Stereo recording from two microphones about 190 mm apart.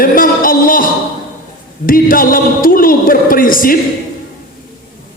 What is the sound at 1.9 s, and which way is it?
A man's voice, 50° left (ahead or behind).